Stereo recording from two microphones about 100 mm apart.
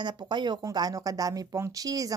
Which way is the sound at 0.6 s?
40° right (ahead or behind).